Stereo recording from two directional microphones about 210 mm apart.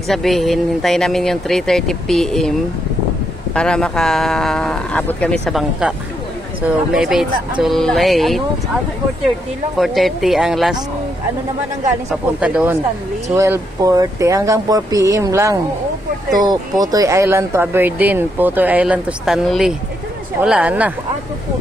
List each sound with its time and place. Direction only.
0.1 s speech: centre (ahead or behind)
3.5 s speech: 5° left (ahead or behind)
9.8 s speech: centre (ahead or behind)
12.1 s speech: 5° right (ahead or behind)